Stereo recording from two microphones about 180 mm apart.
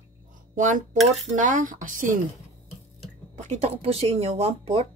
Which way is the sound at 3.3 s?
40° right (ahead or behind).